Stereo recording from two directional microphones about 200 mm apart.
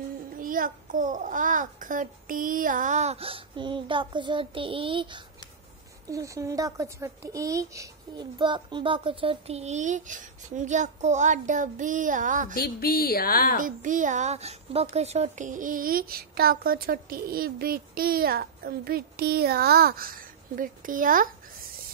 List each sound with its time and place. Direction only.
0.4 s speech: 45° right (ahead or behind)
12.5 s a woman's voice: 50° left (ahead or behind)
13.6 s a child's voice: 40° right (ahead or behind)